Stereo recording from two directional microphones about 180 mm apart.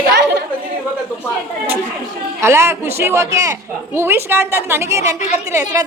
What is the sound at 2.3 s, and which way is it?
A woman's voice, 15° right (ahead or behind).